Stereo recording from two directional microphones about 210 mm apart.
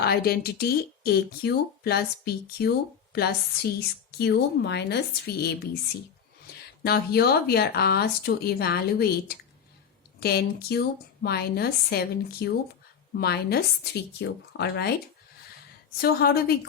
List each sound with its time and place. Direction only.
0.0 s speech: 50° left (ahead or behind)
6.8 s speech: 50° left (ahead or behind)
16.0 s speech: 50° left (ahead or behind)